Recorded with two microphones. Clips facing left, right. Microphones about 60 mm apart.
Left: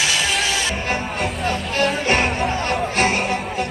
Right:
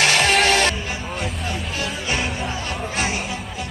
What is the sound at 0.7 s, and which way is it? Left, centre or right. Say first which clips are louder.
Music: left 5 dB; left.